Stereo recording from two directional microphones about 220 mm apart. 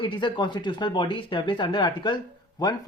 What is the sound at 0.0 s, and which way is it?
Speech, 20° left (ahead or behind).